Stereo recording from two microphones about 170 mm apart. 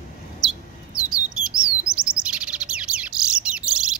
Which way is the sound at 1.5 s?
5° right (ahead or behind).